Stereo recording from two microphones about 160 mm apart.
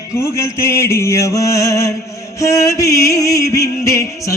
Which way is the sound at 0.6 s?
15° left (ahead or behind).